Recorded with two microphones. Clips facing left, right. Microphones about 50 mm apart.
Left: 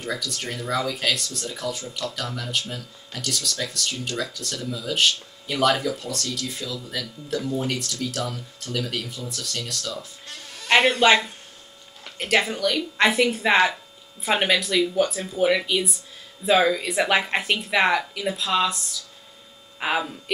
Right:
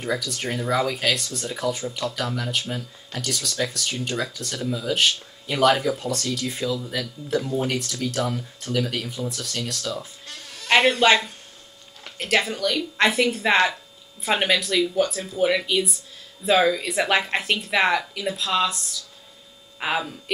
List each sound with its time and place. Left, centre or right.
0.0 s speech: centre
0.9 s speech: centre
1.4 s speech: right
7.5 s speech: centre
10.3 s a sound: centre
12.2 s speech: centre